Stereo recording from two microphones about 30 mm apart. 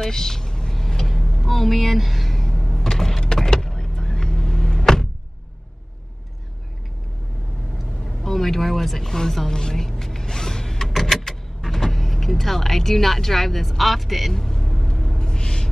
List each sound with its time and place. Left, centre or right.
0.0 s vehicle: centre
3.0 s vehicle: centre
8.2 s speech: centre; by 9.8 s left
9.8 s power windows: centre
10.9 s vehicle: centre
14.3 s vehicle: centre
15.1 s a sound: left